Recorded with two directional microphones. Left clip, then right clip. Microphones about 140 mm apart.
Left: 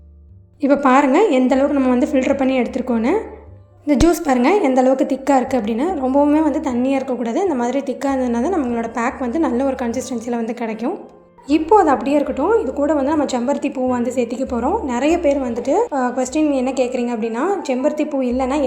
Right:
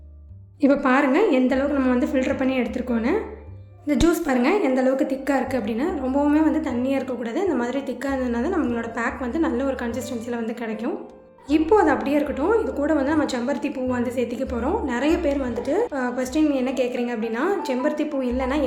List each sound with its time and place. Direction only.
0.8 s a woman's voice: 45° left (ahead or behind)
11.4 s a woman's voice: 30° left (ahead or behind)